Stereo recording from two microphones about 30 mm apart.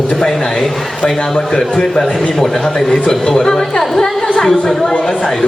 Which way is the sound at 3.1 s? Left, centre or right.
Centre.